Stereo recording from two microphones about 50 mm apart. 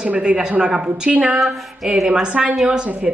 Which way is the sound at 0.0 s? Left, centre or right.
Right.